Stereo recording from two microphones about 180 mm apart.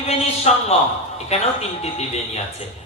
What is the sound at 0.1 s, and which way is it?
A man's voice, 35° left (ahead or behind).